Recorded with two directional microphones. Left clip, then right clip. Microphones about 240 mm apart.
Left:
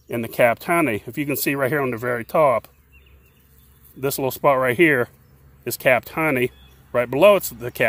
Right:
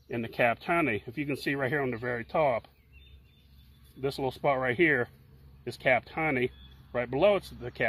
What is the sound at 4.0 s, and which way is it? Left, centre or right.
Speech, left.